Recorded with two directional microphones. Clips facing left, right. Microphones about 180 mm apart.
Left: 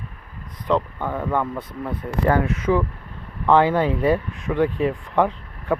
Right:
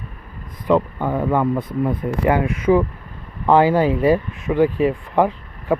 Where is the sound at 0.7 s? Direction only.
10° right (ahead or behind).